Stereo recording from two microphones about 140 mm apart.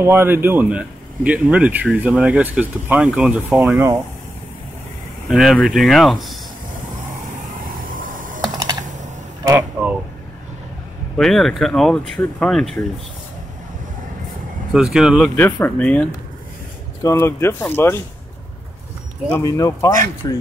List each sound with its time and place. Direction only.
0.0 s speech: 15° right (ahead or behind)
5.3 s speech: centre (ahead or behind)
8.4 s computer keyboard: 30° right (ahead or behind)
9.6 s a sound: 10° right (ahead or behind)
11.1 s speech: centre (ahead or behind)
14.7 s speech: 5° right (ahead or behind)
15.3 s speech: 10° left (ahead or behind)
19.4 s speech: 25° left (ahead or behind)